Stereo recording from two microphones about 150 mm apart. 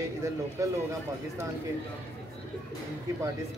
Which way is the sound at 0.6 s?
20° right (ahead or behind).